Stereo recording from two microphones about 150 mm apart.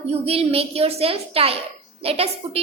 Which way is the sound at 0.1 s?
40° right (ahead or behind).